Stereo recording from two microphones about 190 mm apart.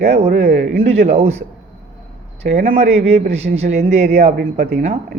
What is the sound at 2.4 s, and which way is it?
Speech, 50° right (ahead or behind).